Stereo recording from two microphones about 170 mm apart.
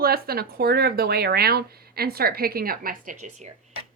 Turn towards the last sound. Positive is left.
turn(degrees=-45)  # may be behind; listen again after turning